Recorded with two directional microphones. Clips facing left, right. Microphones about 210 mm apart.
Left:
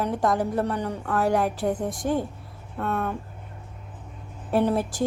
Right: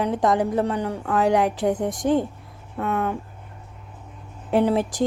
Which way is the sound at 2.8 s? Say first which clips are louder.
Right 3 dB; 10° right (ahead or behind).